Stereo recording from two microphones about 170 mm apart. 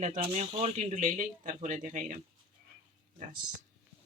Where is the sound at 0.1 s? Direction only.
35° right (ahead or behind).